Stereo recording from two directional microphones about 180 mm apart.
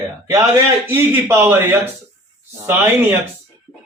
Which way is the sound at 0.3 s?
15° right (ahead or behind).